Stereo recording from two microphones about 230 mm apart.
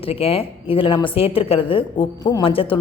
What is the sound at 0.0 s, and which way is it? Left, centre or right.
A woman's voice, left.